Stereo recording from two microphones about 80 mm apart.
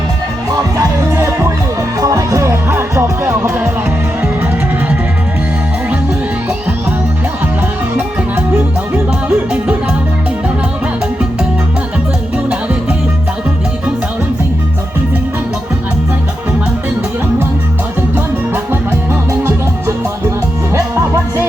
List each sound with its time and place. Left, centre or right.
1.1 s music: right
7.9 s music: right
9.3 s music: centre
19.3 s music: right
20.7 s music: right